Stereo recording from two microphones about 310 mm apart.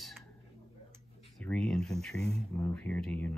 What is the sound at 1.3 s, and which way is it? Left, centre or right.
Speech, centre.